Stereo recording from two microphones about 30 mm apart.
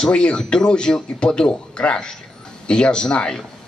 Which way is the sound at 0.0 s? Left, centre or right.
Left.